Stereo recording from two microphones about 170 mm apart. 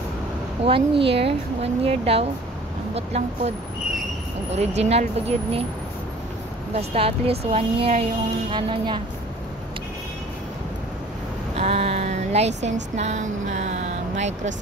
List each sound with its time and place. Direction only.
0.7 s speech: 30° right (ahead or behind)
6.7 s speech: 35° right (ahead or behind)
11.5 s speech: 35° right (ahead or behind)